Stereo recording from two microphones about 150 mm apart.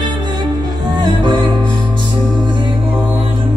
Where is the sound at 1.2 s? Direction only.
30° right (ahead or behind).